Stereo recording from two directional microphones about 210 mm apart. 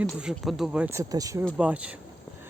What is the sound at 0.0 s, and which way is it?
Speech, 5° right (ahead or behind).